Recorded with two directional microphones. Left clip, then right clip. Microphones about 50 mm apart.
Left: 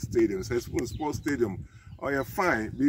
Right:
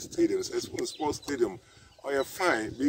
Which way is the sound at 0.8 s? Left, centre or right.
Left.